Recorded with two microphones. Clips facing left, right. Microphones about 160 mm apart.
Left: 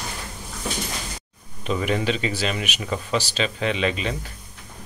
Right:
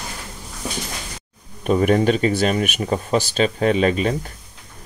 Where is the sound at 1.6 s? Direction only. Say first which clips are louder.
Right 7 dB; 50° right (ahead or behind).